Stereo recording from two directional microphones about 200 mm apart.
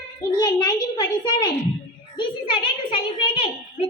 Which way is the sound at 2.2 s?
25° left (ahead or behind).